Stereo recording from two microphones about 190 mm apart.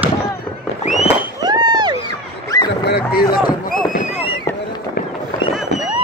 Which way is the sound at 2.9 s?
55° left (ahead or behind).